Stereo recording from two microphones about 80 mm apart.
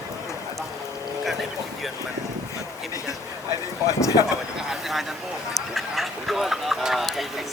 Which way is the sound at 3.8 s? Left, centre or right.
Left.